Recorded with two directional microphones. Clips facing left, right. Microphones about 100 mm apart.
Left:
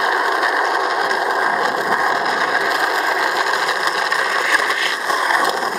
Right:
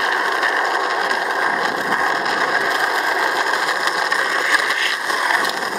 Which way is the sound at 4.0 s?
Centre (ahead or behind).